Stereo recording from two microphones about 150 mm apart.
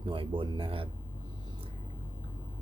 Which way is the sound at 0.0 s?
35° right (ahead or behind).